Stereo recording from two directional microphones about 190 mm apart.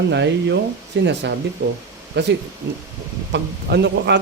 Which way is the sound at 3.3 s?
65° right (ahead or behind).